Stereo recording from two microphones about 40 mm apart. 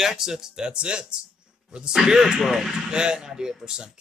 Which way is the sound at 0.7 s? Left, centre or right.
Right.